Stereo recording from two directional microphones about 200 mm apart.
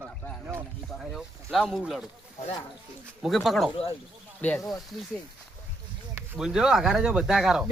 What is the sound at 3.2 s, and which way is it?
Speech, centre (ahead or behind).